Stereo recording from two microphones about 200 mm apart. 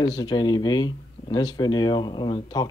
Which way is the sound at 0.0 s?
20° left (ahead or behind).